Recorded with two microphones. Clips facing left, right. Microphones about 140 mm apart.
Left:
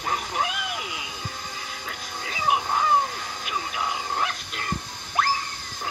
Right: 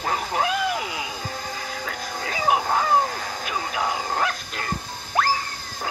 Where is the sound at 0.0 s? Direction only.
40° right (ahead or behind).